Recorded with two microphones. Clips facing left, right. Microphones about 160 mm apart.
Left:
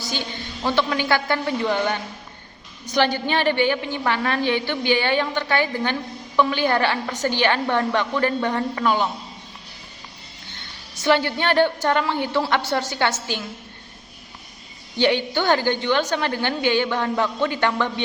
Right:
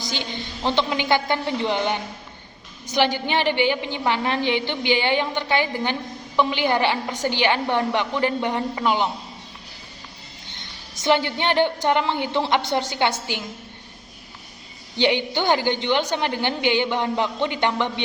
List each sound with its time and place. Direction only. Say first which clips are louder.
0.0 s a woman's voice: even; 20° right (ahead or behind)
11.0 s a woman's voice: left 1 dB; 20° right (ahead or behind)
14.9 s a woman's voice: left 1 dB; 15° right (ahead or behind)